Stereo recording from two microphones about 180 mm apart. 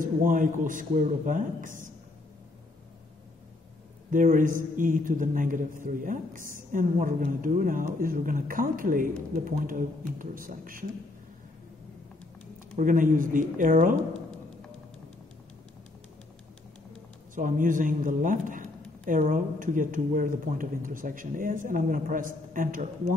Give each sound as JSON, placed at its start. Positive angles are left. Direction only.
{"t": 0.0, "sound": "speech", "side_deg": -50}
{"t": 4.1, "sound": "speech", "side_deg": -50}
{"t": 12.7, "sound": "speech", "side_deg": -50}
{"t": 17.4, "sound": "speech", "side_deg": -50}